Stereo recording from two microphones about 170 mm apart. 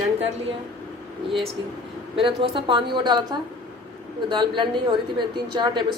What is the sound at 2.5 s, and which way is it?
Speech, 30° right (ahead or behind).